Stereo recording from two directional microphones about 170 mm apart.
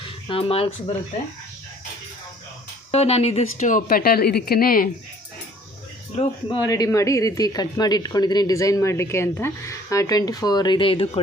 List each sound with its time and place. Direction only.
0.3 s speech: 30° left (ahead or behind)
2.9 s speech: 35° left (ahead or behind); by 4.9 s 60° left (ahead or behind)
6.6 s speech: 20° left (ahead or behind)